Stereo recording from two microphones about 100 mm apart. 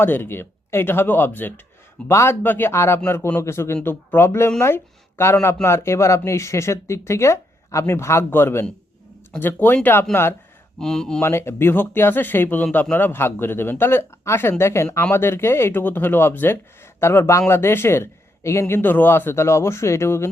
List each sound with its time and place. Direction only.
0.0 s speech: 20° left (ahead or behind)
10.8 s speech: 5° left (ahead or behind)
11.2 s speech: 25° left (ahead or behind)